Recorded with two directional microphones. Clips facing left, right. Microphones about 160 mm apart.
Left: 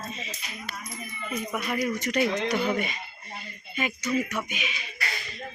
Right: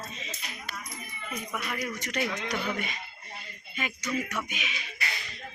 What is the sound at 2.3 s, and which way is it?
Speech, 25° left (ahead or behind).